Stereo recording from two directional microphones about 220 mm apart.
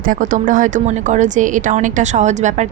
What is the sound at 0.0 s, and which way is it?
A woman's voice, 35° right (ahead or behind).